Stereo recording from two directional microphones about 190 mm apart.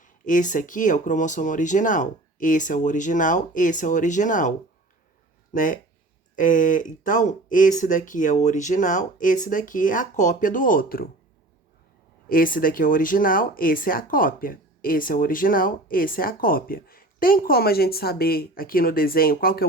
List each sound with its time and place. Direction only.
0.0 s speech: 45° left (ahead or behind)
5.5 s speech: 45° left (ahead or behind)
12.3 s speech: 45° left (ahead or behind)